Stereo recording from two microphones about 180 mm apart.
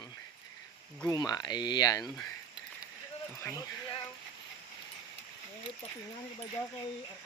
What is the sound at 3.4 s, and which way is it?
Speech, 20° left (ahead or behind).